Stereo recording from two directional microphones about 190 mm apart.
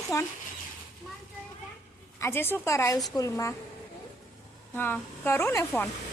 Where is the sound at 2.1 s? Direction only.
15° left (ahead or behind).